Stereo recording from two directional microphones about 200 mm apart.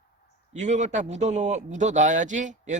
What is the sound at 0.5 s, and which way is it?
Speech, 35° right (ahead or behind).